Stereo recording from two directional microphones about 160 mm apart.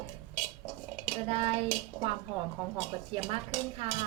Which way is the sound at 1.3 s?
35° right (ahead or behind).